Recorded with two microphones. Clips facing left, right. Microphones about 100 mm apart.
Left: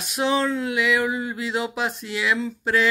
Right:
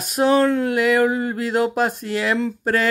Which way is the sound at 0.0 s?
45° right (ahead or behind).